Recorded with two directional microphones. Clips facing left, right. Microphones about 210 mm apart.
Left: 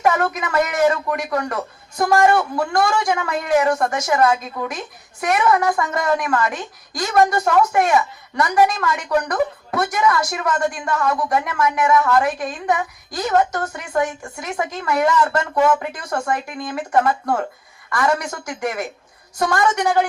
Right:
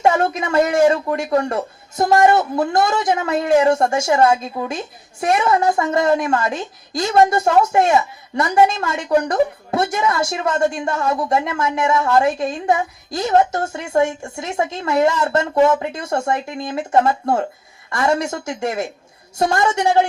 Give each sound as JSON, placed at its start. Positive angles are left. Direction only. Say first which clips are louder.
{"t": 0.0, "sound": "speech", "louder": "right 2 dB", "side_deg": -25}